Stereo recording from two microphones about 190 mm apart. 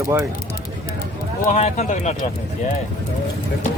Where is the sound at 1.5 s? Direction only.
40° left (ahead or behind).